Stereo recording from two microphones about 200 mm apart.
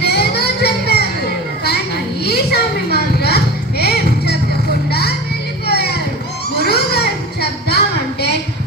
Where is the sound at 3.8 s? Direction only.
55° left (ahead or behind).